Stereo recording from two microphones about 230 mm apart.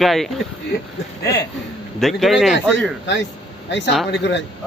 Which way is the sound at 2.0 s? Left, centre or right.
Centre.